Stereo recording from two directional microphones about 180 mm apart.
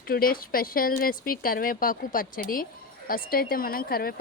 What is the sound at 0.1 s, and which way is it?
Speech, 55° left (ahead or behind).